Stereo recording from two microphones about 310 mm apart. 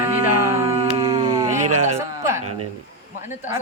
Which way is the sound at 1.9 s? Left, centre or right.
Centre.